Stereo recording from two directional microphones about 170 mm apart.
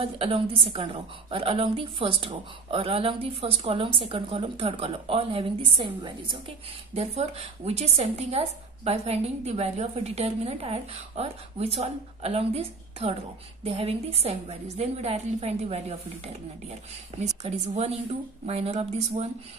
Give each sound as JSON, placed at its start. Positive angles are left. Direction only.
{"t": 0.0, "sound": "a woman's voice", "side_deg": -35}
{"t": 17.1, "sound": "a woman's voice", "side_deg": -40}